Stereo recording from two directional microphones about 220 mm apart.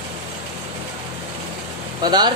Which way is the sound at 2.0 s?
20° right (ahead or behind).